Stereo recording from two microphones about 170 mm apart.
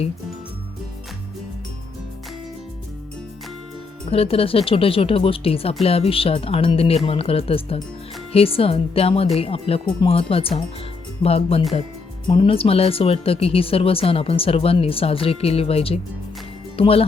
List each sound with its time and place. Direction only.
4.1 s speech: 35° left (ahead or behind)